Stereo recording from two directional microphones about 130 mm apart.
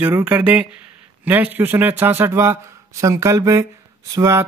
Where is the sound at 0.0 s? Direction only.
15° right (ahead or behind).